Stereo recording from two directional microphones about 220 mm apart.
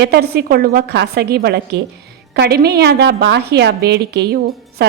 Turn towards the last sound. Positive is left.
turn(degrees=-45)  # may be behind; listen again after turning